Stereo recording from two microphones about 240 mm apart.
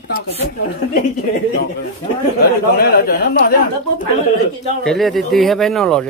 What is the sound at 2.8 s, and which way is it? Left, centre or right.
Speech, left.